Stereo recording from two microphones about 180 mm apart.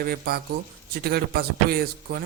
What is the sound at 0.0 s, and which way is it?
Speech, 60° right (ahead or behind).